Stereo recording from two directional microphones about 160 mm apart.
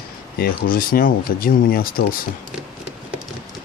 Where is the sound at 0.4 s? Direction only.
65° left (ahead or behind).